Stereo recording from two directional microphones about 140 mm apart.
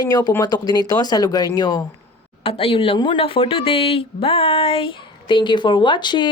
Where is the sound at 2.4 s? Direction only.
40° left (ahead or behind).